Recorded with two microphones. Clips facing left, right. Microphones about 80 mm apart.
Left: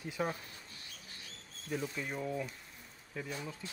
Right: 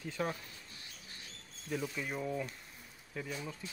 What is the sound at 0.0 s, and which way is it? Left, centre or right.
Speech, centre.